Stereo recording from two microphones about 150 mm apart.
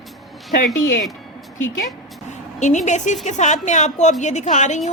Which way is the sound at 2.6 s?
50° left (ahead or behind).